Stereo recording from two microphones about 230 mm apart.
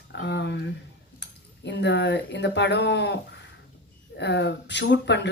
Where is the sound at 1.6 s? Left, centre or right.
Left.